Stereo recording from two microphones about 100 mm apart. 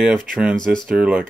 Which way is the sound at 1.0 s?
10° right (ahead or behind).